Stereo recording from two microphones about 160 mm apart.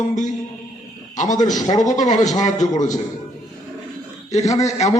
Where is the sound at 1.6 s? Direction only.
25° left (ahead or behind).